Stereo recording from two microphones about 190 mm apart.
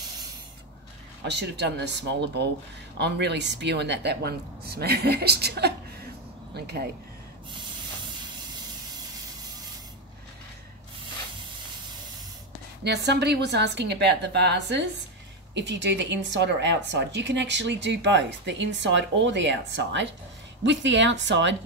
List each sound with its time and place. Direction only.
1.2 s speech: 65° right (ahead or behind)
12.8 s a woman's voice: 60° right (ahead or behind)